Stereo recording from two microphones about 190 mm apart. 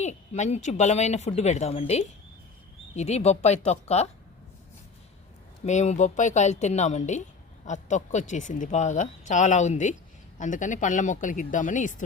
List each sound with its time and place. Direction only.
0.0 s a woman's voice: 35° left (ahead or behind)
5.6 s a woman's voice: 35° left (ahead or behind)